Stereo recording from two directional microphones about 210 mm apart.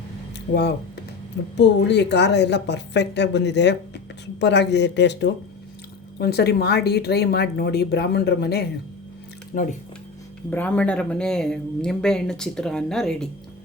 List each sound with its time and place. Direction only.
1.5 s a woman's voice: 55° left (ahead or behind)
10.5 s speech: 5° left (ahead or behind)